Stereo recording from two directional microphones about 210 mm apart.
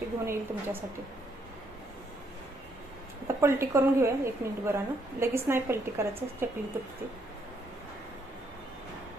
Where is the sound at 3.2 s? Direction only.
15° right (ahead or behind).